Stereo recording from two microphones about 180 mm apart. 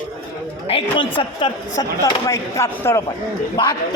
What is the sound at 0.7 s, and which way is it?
A woman's voice, 30° left (ahead or behind).